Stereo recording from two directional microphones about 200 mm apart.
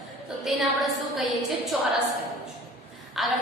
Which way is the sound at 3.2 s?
Centre (ahead or behind).